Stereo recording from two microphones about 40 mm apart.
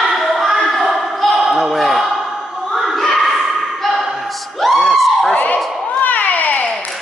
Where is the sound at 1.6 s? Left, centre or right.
Centre.